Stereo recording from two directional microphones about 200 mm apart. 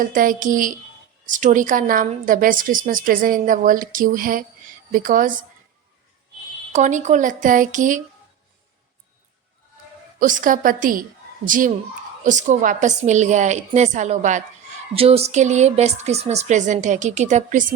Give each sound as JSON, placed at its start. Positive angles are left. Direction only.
{"t": 0.0, "sound": "a woman's voice", "side_deg": -45}
{"t": 6.7, "sound": "a woman's voice", "side_deg": -40}
{"t": 10.2, "sound": "a woman's voice", "side_deg": -40}